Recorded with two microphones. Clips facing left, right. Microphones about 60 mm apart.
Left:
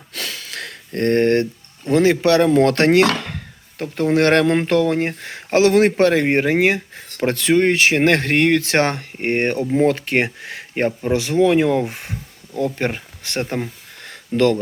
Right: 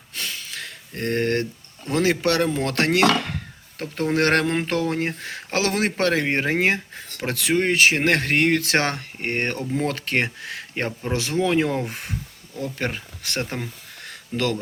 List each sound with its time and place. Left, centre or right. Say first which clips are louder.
0.1 s sniff: left 3 dB; left
1.0 s speech: left 7 dB; left
2.5 s speech: left 11 dB; left
2.7 s speech: left 4 dB; left
7.2 s speech: left 6 dB; left
11.3 s speech: left 6 dB; left
11.9 s speech: left 1 dB; left
14.1 s a sound: left 9 dB; left